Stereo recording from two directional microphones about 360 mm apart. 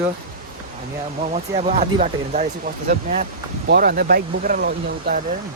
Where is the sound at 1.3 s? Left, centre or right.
Centre.